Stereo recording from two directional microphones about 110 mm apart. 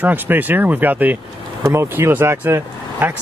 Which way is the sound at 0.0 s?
15° right (ahead or behind).